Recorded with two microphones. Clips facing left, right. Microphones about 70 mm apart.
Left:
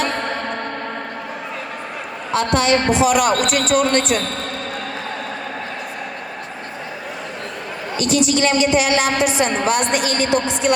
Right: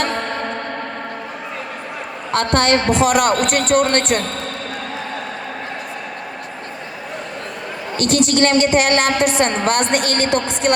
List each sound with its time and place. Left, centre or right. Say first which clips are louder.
2.3 s a woman's voice: right 1 dB; right
7.9 s a woman's voice: right 2 dB; right